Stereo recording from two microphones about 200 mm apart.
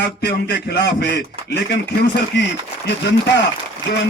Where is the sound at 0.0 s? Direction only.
55° left (ahead or behind).